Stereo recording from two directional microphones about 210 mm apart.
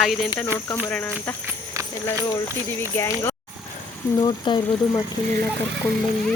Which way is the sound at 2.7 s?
15° left (ahead or behind).